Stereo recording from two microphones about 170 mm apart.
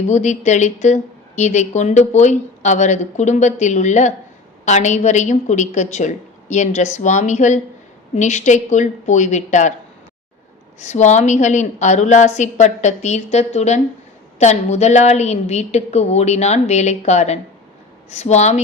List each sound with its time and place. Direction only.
0.1 s a woman's voice: 45° left (ahead or behind)
10.8 s a woman's voice: 45° left (ahead or behind)